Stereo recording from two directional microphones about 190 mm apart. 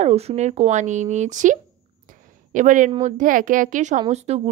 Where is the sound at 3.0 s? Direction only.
45° right (ahead or behind).